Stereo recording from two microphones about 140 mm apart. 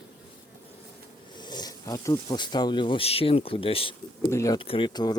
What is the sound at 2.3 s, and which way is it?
Speech, 30° left (ahead or behind).